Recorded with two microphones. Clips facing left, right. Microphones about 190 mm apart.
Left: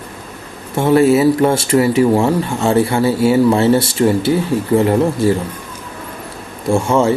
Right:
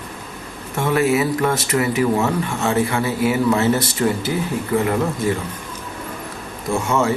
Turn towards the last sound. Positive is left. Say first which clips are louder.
# left 6 dB
turn(degrees=30)  # may be behind; listen again after turning